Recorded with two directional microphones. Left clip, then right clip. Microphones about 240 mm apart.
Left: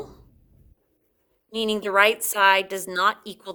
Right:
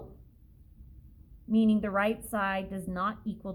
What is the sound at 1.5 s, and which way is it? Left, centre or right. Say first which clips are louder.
A woman's voice: left 7 dB; left.